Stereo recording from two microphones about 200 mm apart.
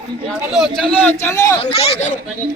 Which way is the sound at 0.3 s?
Centre (ahead or behind).